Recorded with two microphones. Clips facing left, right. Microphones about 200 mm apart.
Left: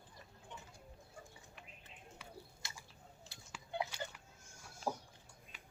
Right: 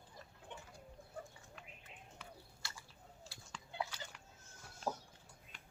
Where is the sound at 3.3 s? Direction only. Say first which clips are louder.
Right 2 dB; 20° left (ahead or behind).